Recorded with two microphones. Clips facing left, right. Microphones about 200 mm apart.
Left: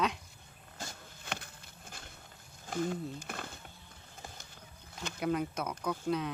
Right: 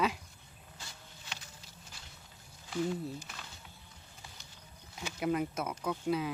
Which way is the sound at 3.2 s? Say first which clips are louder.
Left 7 dB; 55° left (ahead or behind).